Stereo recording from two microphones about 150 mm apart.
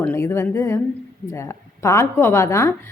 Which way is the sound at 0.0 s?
15° left (ahead or behind).